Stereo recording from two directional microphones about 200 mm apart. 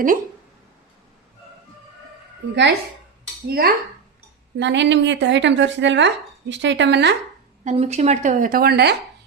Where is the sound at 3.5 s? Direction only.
50° right (ahead or behind).